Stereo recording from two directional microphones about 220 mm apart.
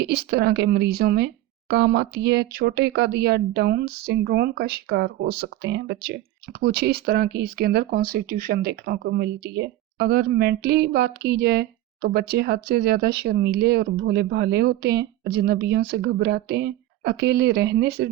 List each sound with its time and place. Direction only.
0.0 s speech: 50° right (ahead or behind)